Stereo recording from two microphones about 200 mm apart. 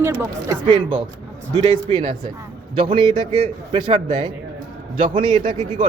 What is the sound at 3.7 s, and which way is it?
Speech, 25° right (ahead or behind).